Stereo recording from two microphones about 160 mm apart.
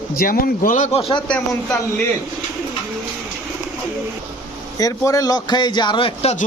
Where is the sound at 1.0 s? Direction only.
35° left (ahead or behind).